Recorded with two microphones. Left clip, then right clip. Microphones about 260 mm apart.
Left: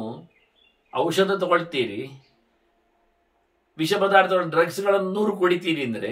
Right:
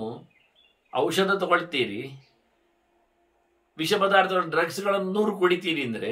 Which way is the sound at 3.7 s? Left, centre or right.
Centre.